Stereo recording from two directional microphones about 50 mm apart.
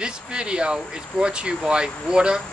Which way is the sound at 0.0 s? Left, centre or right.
Centre.